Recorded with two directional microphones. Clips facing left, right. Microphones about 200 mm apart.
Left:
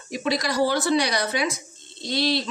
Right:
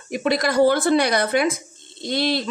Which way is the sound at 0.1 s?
55° right (ahead or behind).